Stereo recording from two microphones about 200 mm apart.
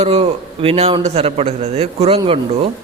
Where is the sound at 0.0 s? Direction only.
30° right (ahead or behind).